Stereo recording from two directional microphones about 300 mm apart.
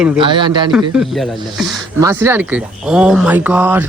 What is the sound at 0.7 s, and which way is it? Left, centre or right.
Speech, centre.